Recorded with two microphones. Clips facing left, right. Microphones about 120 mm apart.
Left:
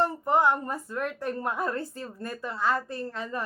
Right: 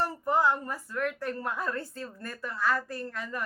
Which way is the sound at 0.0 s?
20° left (ahead or behind).